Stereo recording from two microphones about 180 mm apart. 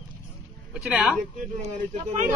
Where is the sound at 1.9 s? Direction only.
40° right (ahead or behind).